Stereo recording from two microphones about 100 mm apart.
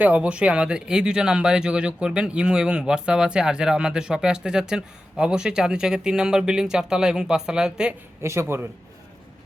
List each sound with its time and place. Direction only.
0.0 s speech: 15° right (ahead or behind)
8.2 s speech: 25° right (ahead or behind)